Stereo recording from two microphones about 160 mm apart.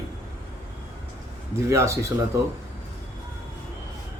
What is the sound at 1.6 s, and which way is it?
Speech, 20° right (ahead or behind).